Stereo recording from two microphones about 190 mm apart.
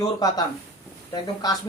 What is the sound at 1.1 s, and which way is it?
Speech, 20° left (ahead or behind).